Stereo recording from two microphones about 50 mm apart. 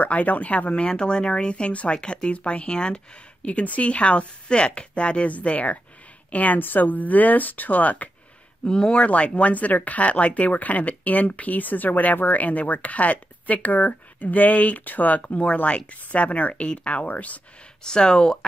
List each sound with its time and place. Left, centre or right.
0.0 s speech: left
8.6 s speech: centre
17.8 s speech: centre